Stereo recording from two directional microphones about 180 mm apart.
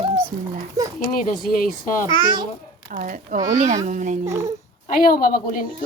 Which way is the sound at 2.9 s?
50° right (ahead or behind).